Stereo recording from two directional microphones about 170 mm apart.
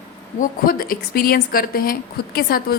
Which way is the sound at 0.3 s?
55° left (ahead or behind).